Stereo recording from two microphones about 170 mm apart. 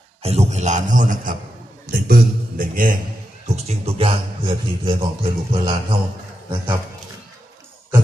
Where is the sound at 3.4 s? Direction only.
40° right (ahead or behind).